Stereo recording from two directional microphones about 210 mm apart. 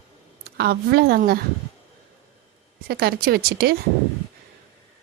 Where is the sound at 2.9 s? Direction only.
50° right (ahead or behind).